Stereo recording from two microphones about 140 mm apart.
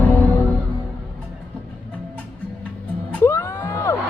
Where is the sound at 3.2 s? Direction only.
20° left (ahead or behind).